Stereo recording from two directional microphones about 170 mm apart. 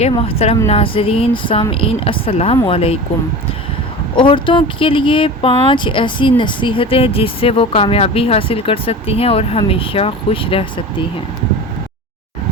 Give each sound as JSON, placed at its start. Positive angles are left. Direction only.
{"t": 0.1, "sound": "speech", "side_deg": 35}
{"t": 4.1, "sound": "speech", "side_deg": 30}